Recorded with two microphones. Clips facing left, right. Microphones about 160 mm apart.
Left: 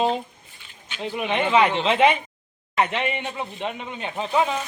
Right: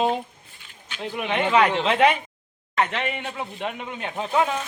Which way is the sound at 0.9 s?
5° left (ahead or behind).